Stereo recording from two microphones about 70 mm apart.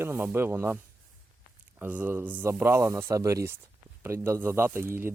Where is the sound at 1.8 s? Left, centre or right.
Right.